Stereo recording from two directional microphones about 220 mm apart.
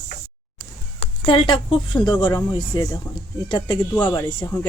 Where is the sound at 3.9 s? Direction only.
10° left (ahead or behind).